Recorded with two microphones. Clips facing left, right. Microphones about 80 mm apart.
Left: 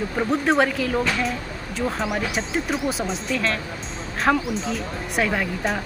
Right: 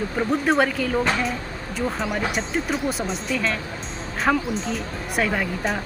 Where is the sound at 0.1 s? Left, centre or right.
Centre.